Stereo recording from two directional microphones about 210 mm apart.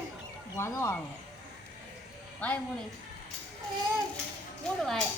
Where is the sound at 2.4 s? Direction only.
5° left (ahead or behind).